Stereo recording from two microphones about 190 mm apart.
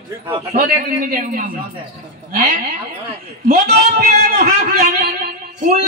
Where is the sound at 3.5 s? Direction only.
55° right (ahead or behind).